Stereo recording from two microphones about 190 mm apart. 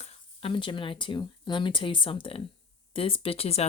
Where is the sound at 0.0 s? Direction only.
30° left (ahead or behind).